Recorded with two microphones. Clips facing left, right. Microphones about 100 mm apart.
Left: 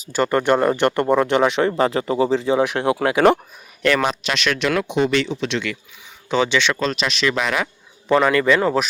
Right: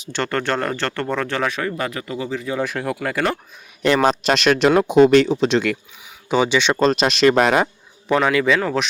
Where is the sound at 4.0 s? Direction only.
40° right (ahead or behind).